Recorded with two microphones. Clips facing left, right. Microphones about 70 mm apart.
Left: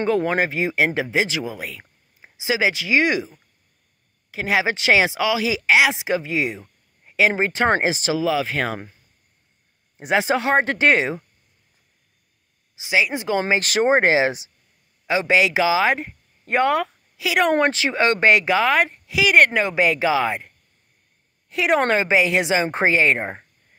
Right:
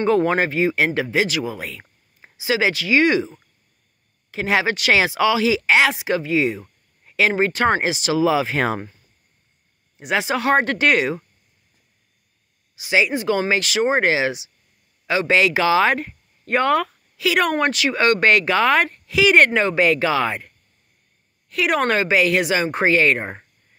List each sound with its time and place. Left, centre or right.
0.0 s speech: centre
1.5 s a sound: centre
2.3 s speech: centre
4.3 s speech: centre
4.6 s a woman's voice: left
4.9 s speech: centre
8.2 s speech: centre
9.9 s a woman's voice: left
12.8 s a woman's voice: left
13.6 s speech: left
13.9 s speech: left
15.0 s speech: centre
17.5 s speech: left; by 20.5 s centre
21.5 s a woman's voice: left